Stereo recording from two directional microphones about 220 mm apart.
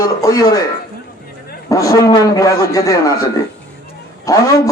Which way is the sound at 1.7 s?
15° left (ahead or behind).